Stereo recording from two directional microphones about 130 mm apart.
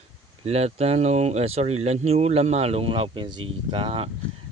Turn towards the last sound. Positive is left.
turn(degrees=-45)  # may be behind; listen again after turning